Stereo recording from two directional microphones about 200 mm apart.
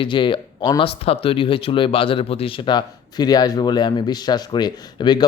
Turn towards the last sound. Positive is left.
turn(degrees=20)  # may be behind; listen again after turning